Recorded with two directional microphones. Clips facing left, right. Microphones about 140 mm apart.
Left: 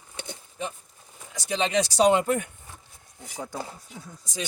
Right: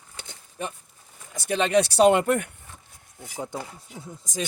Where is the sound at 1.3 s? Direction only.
55° right (ahead or behind).